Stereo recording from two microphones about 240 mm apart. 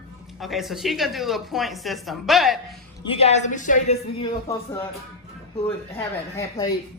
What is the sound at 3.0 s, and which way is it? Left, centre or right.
Speech, left.